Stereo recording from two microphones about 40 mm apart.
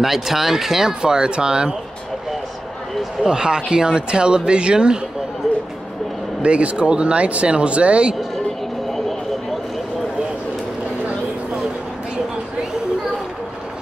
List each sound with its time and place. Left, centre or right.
0.0 s speech: centre
3.3 s speech: centre
6.4 s speech: right